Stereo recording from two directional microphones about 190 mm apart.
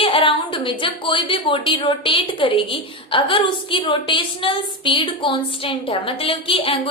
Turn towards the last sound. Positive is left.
turn(degrees=30)  # may be behind; listen again after turning